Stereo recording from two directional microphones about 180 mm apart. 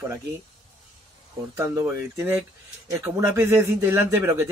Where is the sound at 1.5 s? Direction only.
15° right (ahead or behind).